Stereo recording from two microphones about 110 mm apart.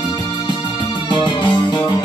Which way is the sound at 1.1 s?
45° left (ahead or behind).